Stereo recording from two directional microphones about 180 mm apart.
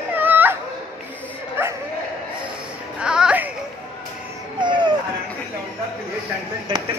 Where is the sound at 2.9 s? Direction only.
5° right (ahead or behind).